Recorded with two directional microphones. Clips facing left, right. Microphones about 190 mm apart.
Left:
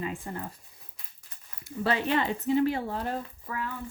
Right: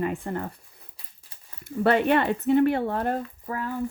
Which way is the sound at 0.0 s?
60° right (ahead or behind).